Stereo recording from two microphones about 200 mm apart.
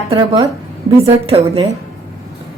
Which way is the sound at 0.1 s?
25° right (ahead or behind).